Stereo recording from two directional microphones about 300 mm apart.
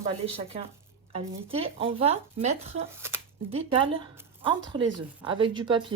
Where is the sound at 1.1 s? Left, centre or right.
Centre.